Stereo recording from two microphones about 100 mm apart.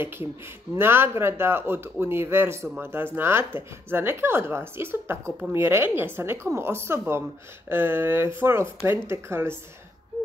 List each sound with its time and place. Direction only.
0.7 s speech: 25° right (ahead or behind)